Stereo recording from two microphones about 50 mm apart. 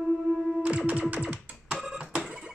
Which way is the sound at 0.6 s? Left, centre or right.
Right.